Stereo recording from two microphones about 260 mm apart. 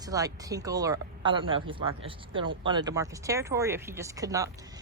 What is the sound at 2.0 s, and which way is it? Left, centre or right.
Speech, centre.